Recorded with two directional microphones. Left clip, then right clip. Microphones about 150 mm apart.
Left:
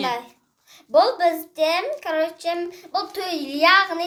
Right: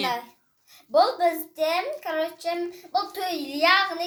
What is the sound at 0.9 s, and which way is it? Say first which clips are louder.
A child's voice: left 3 dB; 20° left (ahead or behind).